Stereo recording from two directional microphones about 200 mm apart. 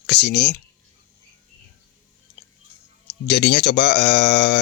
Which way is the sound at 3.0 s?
55° left (ahead or behind).